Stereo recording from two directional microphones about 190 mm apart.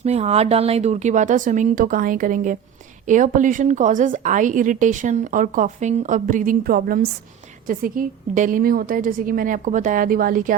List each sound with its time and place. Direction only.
0.0 s a woman's voice: 35° right (ahead or behind)